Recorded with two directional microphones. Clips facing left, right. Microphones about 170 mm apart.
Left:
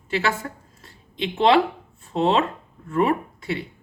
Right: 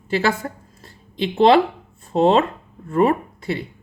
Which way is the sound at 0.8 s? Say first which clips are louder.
Right 4 dB; 35° right (ahead or behind).